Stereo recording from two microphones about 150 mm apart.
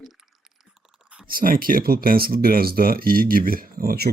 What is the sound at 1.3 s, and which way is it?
Speech, 70° right (ahead or behind).